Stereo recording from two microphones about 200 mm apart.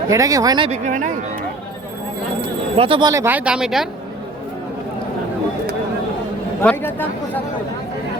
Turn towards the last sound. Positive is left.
turn(degrees=10)  # may be behind; listen again after turning